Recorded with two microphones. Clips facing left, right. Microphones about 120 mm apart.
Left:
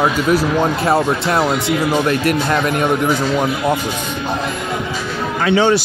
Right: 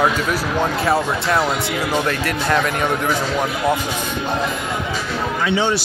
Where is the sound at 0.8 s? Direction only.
25° left (ahead or behind).